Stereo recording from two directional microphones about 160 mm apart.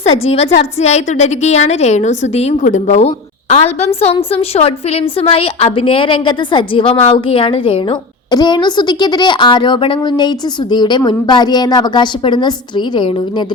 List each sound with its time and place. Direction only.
0.3 s a woman's voice: 40° left (ahead or behind)